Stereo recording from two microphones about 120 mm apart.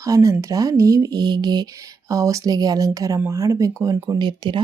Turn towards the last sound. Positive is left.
turn(degrees=-40)  # may be behind; listen again after turning